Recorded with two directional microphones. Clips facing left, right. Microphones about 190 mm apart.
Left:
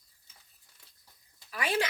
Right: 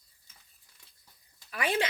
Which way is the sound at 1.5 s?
20° right (ahead or behind).